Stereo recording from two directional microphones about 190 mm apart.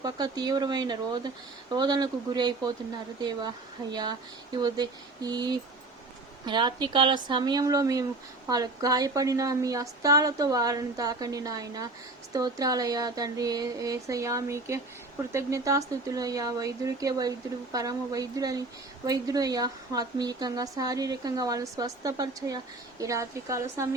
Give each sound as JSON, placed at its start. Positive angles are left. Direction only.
{"t": 0.0, "sound": "a woman's voice", "side_deg": -20}